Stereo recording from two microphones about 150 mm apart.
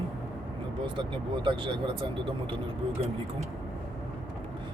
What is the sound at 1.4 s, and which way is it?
Speech, 35° right (ahead or behind).